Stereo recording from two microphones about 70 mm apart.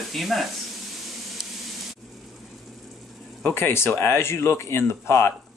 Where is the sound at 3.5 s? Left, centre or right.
Left.